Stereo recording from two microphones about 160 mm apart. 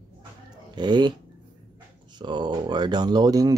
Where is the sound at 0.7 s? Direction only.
30° right (ahead or behind).